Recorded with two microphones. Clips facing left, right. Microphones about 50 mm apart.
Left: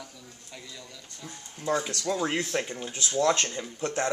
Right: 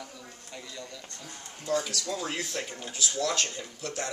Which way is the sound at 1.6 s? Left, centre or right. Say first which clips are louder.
Left 2 dB; left.